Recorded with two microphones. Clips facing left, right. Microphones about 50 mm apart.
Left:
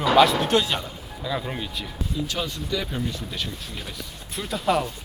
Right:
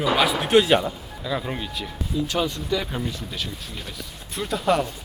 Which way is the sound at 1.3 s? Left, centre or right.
Centre.